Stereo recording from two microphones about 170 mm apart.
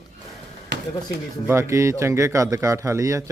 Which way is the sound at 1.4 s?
15° right (ahead or behind).